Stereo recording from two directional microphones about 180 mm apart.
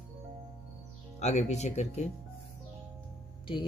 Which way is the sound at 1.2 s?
40° left (ahead or behind).